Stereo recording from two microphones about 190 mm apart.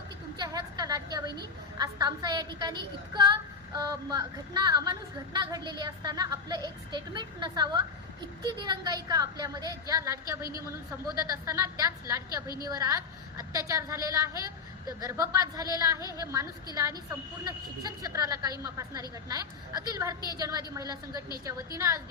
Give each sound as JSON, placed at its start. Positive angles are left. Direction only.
{"t": 0.3, "sound": "a woman's voice", "side_deg": -20}
{"t": 16.0, "sound": "a woman's voice", "side_deg": 20}
{"t": 16.2, "sound": "a woman's voice", "side_deg": -15}